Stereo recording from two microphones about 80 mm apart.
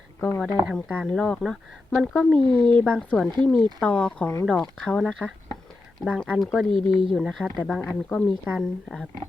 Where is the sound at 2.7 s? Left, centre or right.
Centre.